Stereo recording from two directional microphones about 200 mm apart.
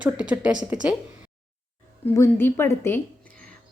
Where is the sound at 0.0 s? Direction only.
5° right (ahead or behind).